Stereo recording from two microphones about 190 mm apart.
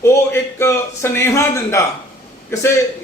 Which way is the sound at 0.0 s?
15° left (ahead or behind).